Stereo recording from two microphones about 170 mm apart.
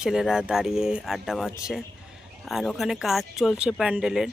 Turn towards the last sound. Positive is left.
turn(degrees=-5)  # may be behind; listen again after turning